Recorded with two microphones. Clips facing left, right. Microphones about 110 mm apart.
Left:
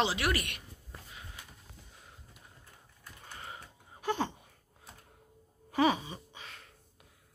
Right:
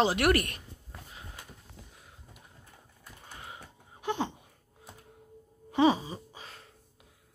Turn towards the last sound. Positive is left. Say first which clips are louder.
# right 3 dB
turn(degrees=-35)  # may be behind; listen again after turning